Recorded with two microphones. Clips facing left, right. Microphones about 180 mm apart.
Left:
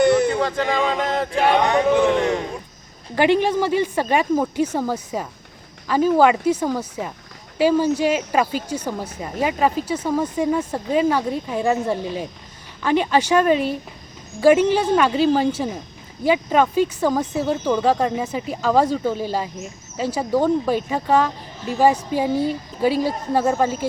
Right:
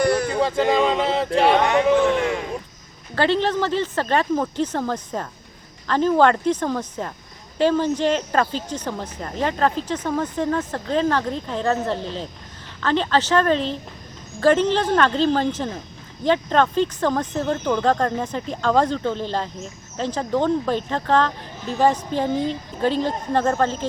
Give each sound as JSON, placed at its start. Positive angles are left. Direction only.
{"t": 0.0, "sound": "a sound", "side_deg": 25}
{"t": 0.4, "sound": "speech", "side_deg": -10}
{"t": 1.5, "sound": "speech", "side_deg": 15}